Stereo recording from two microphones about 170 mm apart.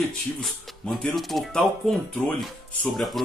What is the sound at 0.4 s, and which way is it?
Speech, centre (ahead or behind).